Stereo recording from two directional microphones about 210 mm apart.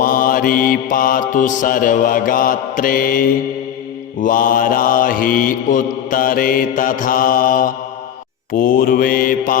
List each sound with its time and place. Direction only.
0.0 s mantra: 40° left (ahead or behind)